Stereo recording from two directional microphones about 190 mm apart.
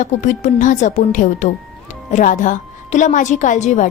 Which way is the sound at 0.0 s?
40° left (ahead or behind).